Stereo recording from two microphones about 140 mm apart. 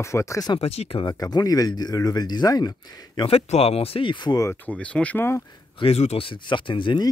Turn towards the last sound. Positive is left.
turn(degrees=35)  # may be behind; listen again after turning